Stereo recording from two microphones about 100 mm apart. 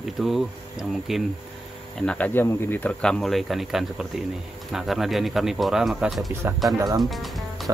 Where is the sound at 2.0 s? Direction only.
15° left (ahead or behind).